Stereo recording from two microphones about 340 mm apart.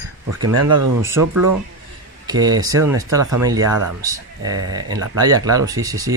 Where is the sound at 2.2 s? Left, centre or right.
Centre.